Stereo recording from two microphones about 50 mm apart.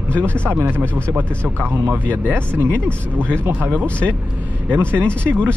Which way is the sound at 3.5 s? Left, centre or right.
Right.